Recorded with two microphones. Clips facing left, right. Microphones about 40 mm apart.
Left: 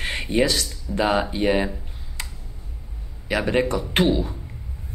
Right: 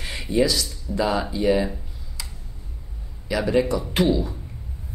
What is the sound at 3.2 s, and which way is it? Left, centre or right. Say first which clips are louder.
Speech: even; left.